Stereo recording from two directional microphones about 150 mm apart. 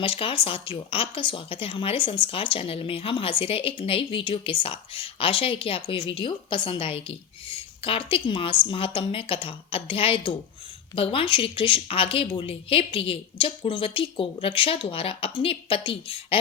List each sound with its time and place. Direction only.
0.0 s speech: 35° left (ahead or behind)